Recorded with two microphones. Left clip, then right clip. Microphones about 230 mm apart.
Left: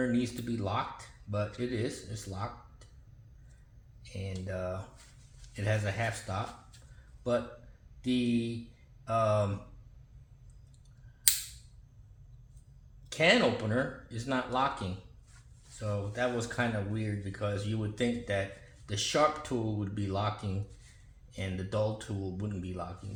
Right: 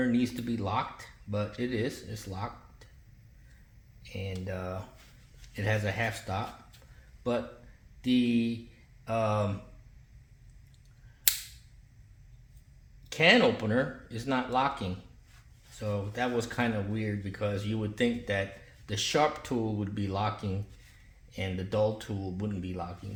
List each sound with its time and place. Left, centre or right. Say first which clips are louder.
0.0 s speech: right 2 dB; right
4.0 s speech: right 3 dB; right
8.0 s speech: right 3 dB; right
13.1 s speech: right 3 dB; right